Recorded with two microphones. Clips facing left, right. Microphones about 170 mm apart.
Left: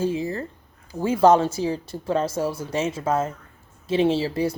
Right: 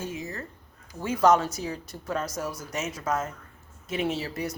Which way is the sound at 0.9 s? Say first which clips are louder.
Left 5 dB; 30° left (ahead or behind).